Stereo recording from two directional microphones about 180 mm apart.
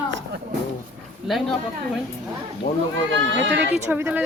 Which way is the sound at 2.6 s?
45° left (ahead or behind).